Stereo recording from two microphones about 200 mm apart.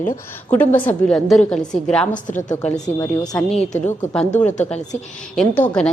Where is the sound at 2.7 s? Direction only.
15° left (ahead or behind).